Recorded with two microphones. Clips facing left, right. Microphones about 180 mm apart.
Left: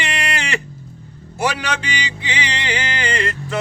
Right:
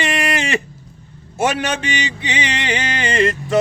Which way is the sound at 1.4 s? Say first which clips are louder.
Right 3 dB; 25° right (ahead or behind).